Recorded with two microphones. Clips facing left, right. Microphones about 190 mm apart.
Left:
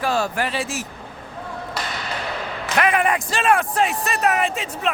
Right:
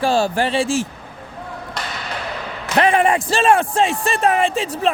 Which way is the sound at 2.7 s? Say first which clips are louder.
Right 4 dB; 30° right (ahead or behind).